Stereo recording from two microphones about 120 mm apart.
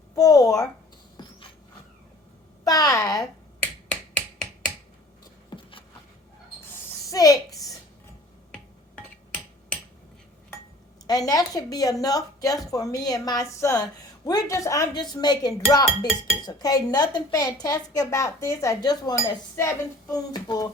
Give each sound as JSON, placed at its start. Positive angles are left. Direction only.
{"t": 0.1, "sound": "a woman's voice", "side_deg": 30}
{"t": 1.2, "sound": "a sound", "side_deg": 35}
{"t": 2.6, "sound": "a woman's voice", "side_deg": 30}
{"t": 5.5, "sound": "beatboxing", "side_deg": 45}
{"t": 7.1, "sound": "a sound", "side_deg": 30}
{"t": 8.5, "sound": "finger snapping", "side_deg": 10}
{"t": 11.0, "sound": "a woman's voice", "side_deg": 35}
{"t": 20.3, "sound": "a woman's voice", "side_deg": 35}